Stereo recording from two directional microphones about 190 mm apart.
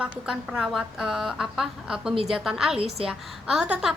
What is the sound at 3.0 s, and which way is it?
Speech, 5° right (ahead or behind).